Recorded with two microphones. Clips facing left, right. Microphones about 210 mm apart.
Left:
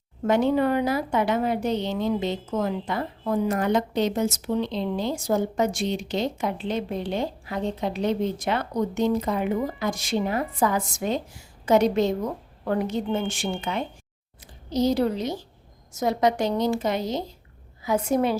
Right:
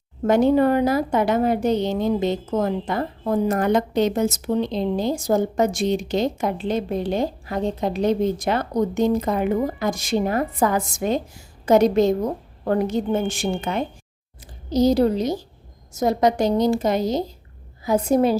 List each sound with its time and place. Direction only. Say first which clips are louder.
0.3 s a woman's voice: right 4 dB; 40° right (ahead or behind)